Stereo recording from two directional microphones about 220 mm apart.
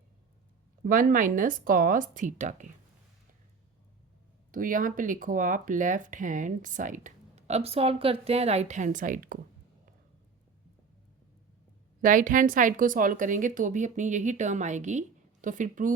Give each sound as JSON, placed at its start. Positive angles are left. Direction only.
{"t": 0.9, "sound": "speech", "side_deg": -40}
{"t": 4.5, "sound": "speech", "side_deg": -40}
{"t": 12.0, "sound": "speech", "side_deg": -40}